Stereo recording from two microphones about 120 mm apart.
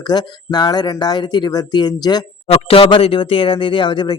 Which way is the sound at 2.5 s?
50° left (ahead or behind).